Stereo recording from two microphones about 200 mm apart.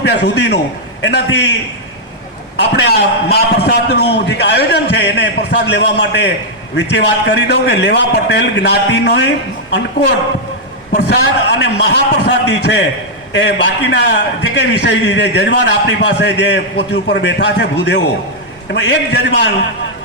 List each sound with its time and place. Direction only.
0.0 s a man's voice: 60° left (ahead or behind)
2.6 s a man's voice: 55° left (ahead or behind)
10.9 s a man's voice: 55° left (ahead or behind)